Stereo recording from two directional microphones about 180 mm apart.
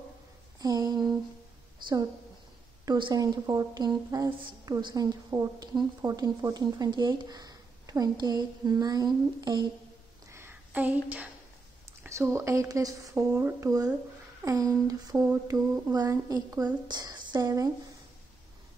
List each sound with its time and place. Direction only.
0.6 s a woman's voice: 20° right (ahead or behind)
2.8 s a woman's voice: 25° right (ahead or behind)
10.3 s a sound: 10° right (ahead or behind)
12.0 s a woman's voice: 15° right (ahead or behind)